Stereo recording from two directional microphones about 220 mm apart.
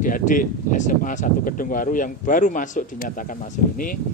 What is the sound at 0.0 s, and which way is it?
Speech, 40° left (ahead or behind).